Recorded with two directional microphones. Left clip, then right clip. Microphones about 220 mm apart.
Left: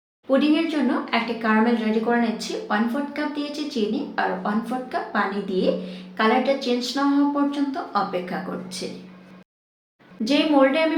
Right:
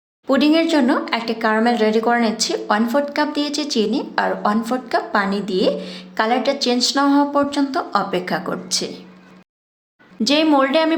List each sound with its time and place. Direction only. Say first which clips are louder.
0.3 s speech: right 5 dB; 50° right (ahead or behind)
10.2 s speech: right 3 dB; 50° right (ahead or behind)